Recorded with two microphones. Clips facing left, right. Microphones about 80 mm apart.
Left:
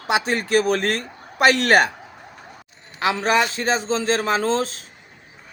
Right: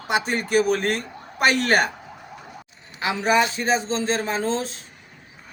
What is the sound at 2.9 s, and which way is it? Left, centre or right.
A man's voice, left.